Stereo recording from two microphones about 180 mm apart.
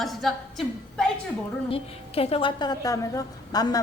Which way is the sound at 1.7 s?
30° left (ahead or behind).